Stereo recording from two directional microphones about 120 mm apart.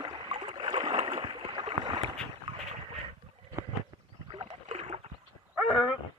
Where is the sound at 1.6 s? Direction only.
30° right (ahead or behind).